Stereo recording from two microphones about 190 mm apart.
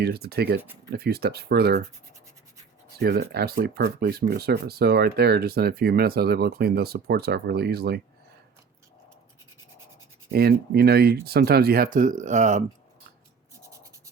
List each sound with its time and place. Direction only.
0.0 s speech: 55° right (ahead or behind)
3.0 s speech: 55° right (ahead or behind)
10.3 s speech: 55° right (ahead or behind); by 12.6 s 40° right (ahead or behind)